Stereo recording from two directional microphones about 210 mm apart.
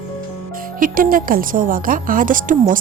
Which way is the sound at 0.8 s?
40° right (ahead or behind).